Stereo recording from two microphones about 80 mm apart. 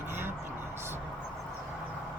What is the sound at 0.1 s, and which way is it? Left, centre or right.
Vehicle, right.